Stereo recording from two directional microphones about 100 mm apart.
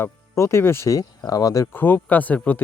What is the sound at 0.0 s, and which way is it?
Speech, 25° left (ahead or behind).